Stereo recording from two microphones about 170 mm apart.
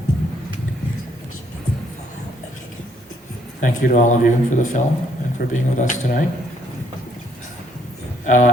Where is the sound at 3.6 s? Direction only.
50° left (ahead or behind).